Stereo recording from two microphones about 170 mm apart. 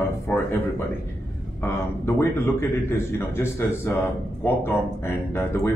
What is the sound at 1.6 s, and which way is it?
Speech, 15° left (ahead or behind).